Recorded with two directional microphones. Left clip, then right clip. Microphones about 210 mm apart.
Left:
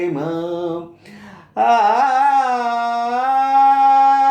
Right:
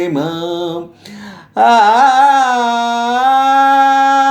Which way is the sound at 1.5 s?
30° right (ahead or behind).